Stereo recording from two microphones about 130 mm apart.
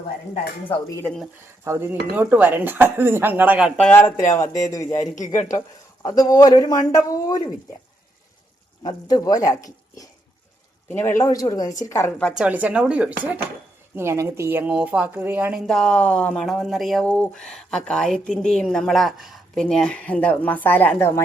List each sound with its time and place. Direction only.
1.6 s speech: 20° right (ahead or behind)
3.8 s a man's voice: 15° left (ahead or behind)
5.1 s speech: 75° left (ahead or behind)
5.5 s a man's voice: 25° left (ahead or behind)
8.8 s a man's voice: 30° left (ahead or behind)
11.2 s a man's voice: 25° left (ahead or behind)
12.4 s speech: 10° right (ahead or behind)
15.5 s speech: 5° left (ahead or behind); by 21.2 s 20° left (ahead or behind)